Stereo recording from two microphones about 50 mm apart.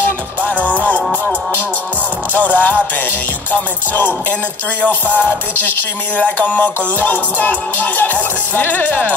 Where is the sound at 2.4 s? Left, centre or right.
Left.